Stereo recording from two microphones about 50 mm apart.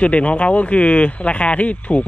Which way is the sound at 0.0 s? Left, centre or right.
Left.